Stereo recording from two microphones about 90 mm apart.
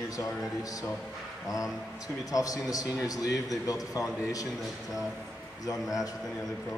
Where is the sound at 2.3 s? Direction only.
40° left (ahead or behind).